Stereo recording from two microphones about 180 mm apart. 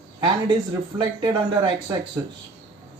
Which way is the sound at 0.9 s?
25° right (ahead or behind).